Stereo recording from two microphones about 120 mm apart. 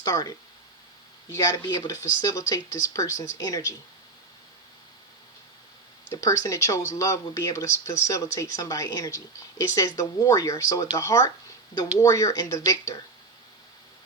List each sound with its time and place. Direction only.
0.0 s speech: 30° left (ahead or behind)
6.1 s speech: 25° left (ahead or behind)